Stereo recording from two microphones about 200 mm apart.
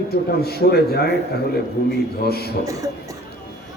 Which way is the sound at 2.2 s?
50° left (ahead or behind).